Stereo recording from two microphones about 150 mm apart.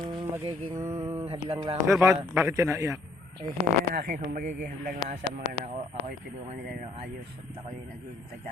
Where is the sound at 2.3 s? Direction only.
20° right (ahead or behind).